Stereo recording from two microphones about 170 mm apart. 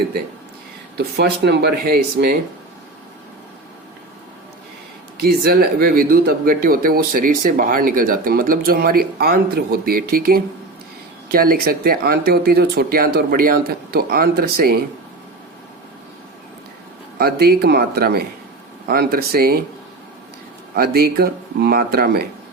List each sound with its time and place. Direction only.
0.9 s speech: 75° right (ahead or behind)
5.1 s speech: 65° right (ahead or behind)
17.2 s speech: 65° right (ahead or behind)
20.7 s speech: 65° right (ahead or behind)